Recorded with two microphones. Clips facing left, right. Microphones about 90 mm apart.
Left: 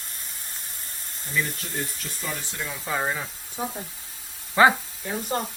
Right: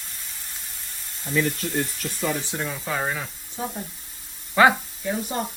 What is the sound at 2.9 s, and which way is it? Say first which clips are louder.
Speech: left 1 dB; 10° left (ahead or behind).